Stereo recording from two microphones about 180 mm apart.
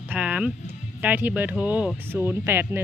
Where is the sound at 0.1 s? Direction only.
5° right (ahead or behind).